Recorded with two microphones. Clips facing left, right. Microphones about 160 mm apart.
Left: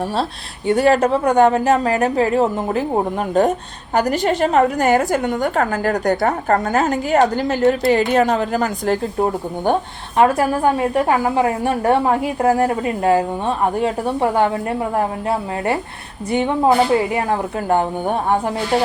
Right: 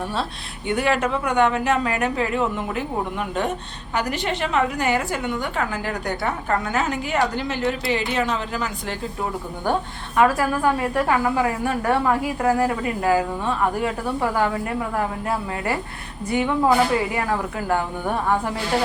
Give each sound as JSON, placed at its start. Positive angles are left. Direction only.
{"t": 0.7, "sound": "a woman's voice", "side_deg": 35}
{"t": 10.2, "sound": "a woman's voice", "side_deg": 25}